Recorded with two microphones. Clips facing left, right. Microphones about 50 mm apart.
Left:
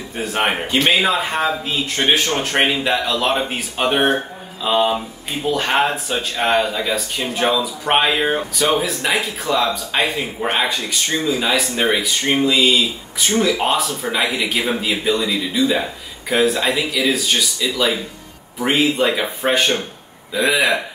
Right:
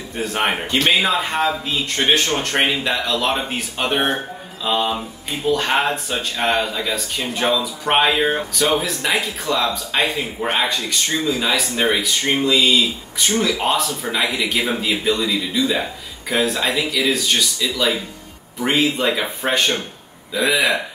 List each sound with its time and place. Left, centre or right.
0.1 s speech: centre